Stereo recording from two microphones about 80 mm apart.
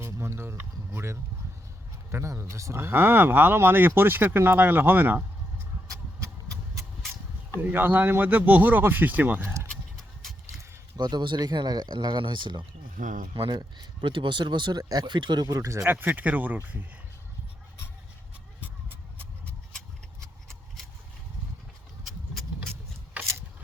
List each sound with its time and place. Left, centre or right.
0.0 s a sound: right
2.0 s speech: right
7.6 s speech: right
9.4 s speech: right
10.9 s speech: right
11.4 s speech: right
13.3 s speech: right
14.8 s speech: right
15.4 s speech: right
15.9 s speech: right
18.6 s vehicle: right
23.2 s a sound: centre